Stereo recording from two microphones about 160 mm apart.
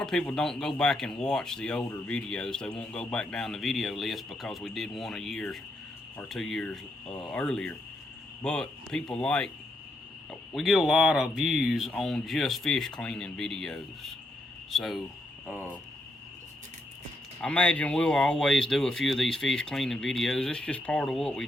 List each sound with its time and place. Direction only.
0.0 s speech: 5° left (ahead or behind)
10.5 s speech: centre (ahead or behind)
17.4 s speech: 10° left (ahead or behind)